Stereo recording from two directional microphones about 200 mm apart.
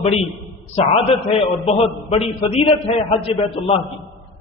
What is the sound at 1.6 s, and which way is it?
A man's voice, 30° left (ahead or behind).